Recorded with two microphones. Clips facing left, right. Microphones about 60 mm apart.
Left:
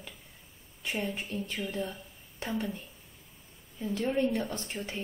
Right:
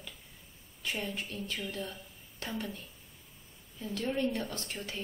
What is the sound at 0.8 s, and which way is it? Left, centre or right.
Speech, centre.